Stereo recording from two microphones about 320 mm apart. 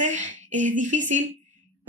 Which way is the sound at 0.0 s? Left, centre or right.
Right.